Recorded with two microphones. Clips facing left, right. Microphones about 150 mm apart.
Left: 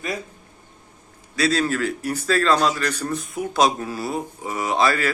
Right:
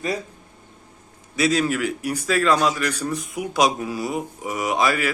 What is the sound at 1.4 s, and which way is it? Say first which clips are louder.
A man's voice: right 1 dB; 15° right (ahead or behind).